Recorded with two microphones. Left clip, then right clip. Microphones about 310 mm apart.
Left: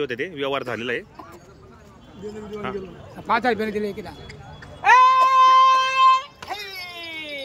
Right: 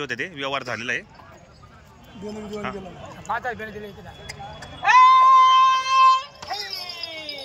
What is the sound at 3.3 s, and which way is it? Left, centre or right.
Speech, left.